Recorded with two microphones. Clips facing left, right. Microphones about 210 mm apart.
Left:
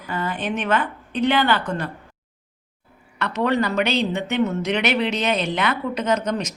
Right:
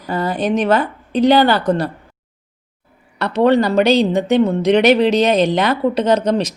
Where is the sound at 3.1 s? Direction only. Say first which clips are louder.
Right 8 dB; 35° right (ahead or behind).